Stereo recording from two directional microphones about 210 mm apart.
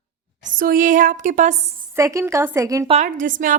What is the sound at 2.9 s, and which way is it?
Speech, 35° right (ahead or behind).